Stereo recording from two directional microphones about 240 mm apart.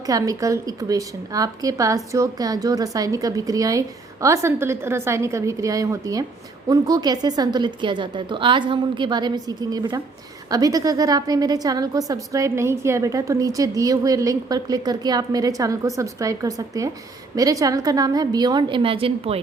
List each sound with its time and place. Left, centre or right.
0.0 s a woman's voice: centre